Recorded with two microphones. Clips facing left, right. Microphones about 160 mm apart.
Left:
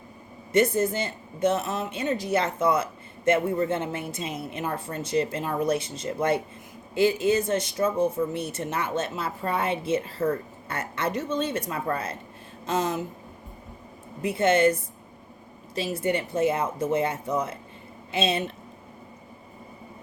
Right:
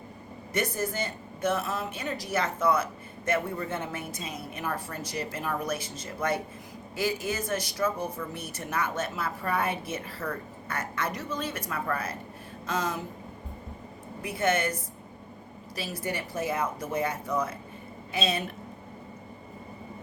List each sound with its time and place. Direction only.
0.5 s speech: 25° left (ahead or behind)
14.2 s speech: 25° left (ahead or behind)
15.7 s a woman's voice: 25° left (ahead or behind)